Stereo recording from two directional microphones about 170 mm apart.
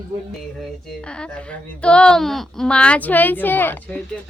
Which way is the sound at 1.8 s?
5° left (ahead or behind).